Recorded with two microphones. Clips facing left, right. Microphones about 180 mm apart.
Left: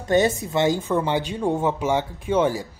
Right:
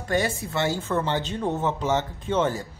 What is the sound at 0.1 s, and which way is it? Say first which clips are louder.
Speech: left 6 dB; 20° left (ahead or behind).